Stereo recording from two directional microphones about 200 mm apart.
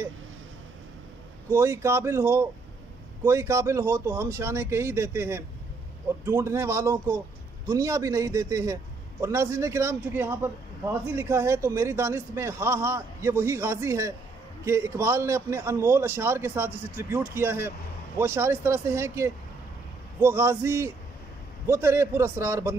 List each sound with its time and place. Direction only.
1.5 s a man's voice: 10° right (ahead or behind)